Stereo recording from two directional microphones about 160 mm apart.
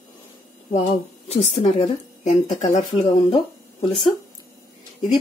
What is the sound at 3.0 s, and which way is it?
Speech, 35° left (ahead or behind).